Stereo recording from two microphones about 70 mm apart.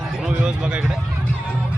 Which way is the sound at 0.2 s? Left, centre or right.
Centre.